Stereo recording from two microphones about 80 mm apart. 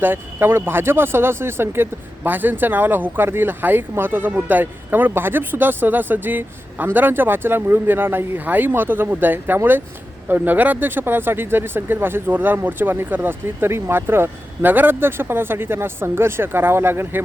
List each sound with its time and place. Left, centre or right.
0.0 s speech: right